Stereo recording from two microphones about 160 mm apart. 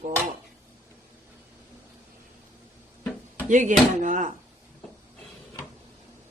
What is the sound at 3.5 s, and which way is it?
Speech, 50° right (ahead or behind).